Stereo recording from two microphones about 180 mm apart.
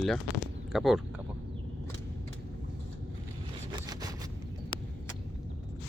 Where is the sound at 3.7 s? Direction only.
25° right (ahead or behind).